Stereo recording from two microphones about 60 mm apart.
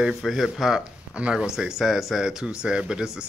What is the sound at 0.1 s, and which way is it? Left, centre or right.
Speech, centre.